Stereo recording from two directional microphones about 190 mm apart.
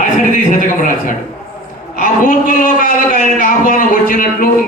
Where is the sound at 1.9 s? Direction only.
45° left (ahead or behind).